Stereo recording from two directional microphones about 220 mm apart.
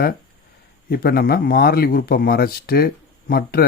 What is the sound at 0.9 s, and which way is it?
Speech, 45° left (ahead or behind).